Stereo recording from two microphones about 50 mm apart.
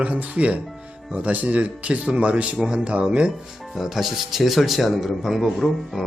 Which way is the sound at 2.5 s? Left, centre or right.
Centre.